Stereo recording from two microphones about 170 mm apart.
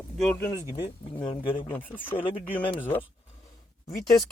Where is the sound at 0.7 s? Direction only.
30° left (ahead or behind).